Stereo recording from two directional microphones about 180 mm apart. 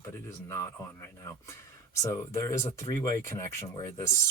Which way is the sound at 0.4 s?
15° left (ahead or behind).